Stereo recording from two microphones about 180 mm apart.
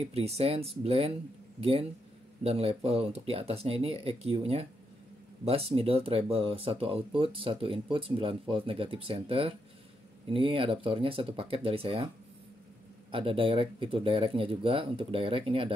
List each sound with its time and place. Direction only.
0.0 s speech: 35° right (ahead or behind)
13.1 s speech: 30° right (ahead or behind)